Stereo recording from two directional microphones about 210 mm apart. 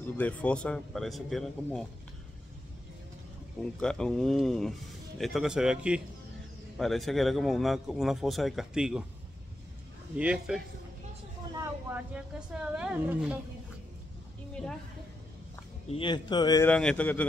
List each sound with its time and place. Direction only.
0.0 s speech: 5° left (ahead or behind)
3.8 s speech: 5° left (ahead or behind)
10.1 s speech: 5° right (ahead or behind)
14.5 s a sound: 5° left (ahead or behind)
15.9 s speech: 20° left (ahead or behind)
16.7 s speech: 5° left (ahead or behind)